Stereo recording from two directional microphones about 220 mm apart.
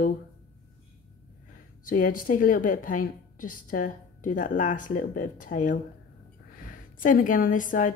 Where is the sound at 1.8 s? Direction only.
40° left (ahead or behind).